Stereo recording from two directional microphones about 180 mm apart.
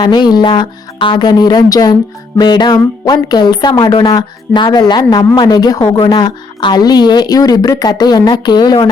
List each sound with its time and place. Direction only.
0.0 s speech: 25° left (ahead or behind)